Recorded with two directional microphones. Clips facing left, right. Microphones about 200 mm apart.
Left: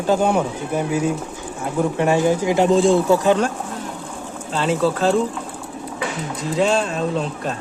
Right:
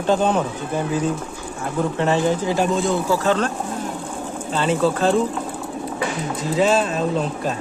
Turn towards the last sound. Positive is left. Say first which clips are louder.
# right 1 dB
turn(degrees=0)  # may be behind; listen again after turning